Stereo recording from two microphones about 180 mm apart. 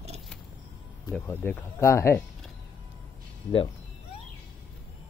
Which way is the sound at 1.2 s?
10° left (ahead or behind).